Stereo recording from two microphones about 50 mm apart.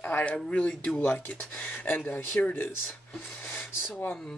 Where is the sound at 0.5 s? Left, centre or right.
Left.